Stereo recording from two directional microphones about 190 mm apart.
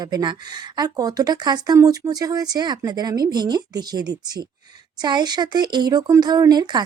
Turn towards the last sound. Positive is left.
turn(degrees=-20)  # may be behind; listen again after turning